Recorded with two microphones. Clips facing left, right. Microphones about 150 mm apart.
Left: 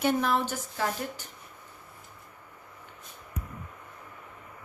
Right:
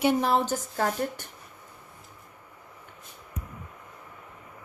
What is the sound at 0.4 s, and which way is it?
Speech, 45° right (ahead or behind).